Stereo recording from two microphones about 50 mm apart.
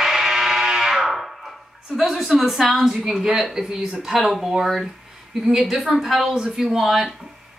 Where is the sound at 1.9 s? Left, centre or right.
Centre.